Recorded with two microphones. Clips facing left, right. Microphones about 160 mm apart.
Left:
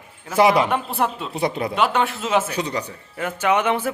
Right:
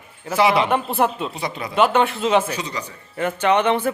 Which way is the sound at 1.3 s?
55° left (ahead or behind).